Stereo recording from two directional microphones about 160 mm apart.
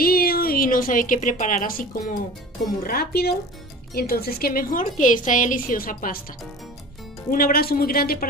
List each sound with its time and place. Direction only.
0.0 s a woman's voice: 70° left (ahead or behind)
2.8 s a woman's voice: 70° left (ahead or behind)
7.2 s speech: 65° left (ahead or behind)